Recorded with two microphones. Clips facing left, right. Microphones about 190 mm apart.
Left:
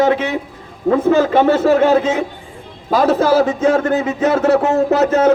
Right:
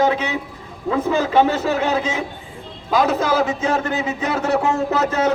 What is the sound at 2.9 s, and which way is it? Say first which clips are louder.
A man's voice: left 5 dB; 35° left (ahead or behind).